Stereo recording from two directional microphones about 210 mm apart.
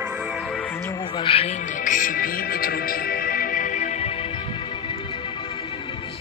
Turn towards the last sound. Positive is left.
turn(degrees=30)  # may be behind; listen again after turning